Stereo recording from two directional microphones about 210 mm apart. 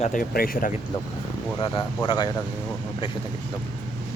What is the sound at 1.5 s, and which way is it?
Speech, 25° left (ahead or behind).